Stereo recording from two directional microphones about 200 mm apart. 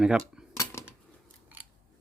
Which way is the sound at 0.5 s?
15° left (ahead or behind).